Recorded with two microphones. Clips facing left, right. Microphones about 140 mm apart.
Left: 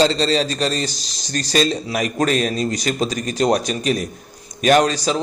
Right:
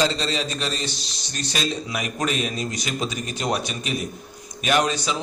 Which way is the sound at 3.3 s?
40° left (ahead or behind).